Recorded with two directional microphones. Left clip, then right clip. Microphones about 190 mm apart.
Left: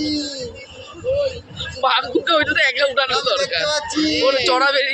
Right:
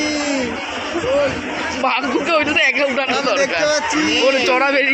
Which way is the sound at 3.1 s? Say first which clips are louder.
Right 2 dB; 55° left (ahead or behind).